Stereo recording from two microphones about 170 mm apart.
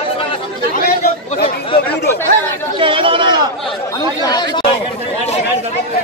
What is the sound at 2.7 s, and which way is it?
Chatter, 30° right (ahead or behind).